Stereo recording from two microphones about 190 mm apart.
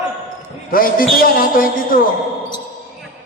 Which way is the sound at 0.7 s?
50° left (ahead or behind).